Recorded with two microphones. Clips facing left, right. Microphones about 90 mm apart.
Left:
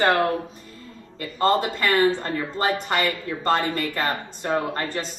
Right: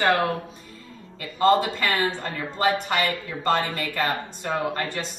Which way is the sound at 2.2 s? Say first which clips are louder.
Even; 40° left (ahead or behind).